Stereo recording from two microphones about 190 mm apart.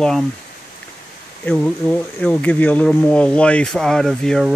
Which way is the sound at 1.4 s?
5° left (ahead or behind).